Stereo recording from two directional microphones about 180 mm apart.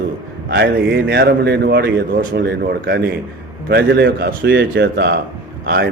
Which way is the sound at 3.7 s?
65° right (ahead or behind).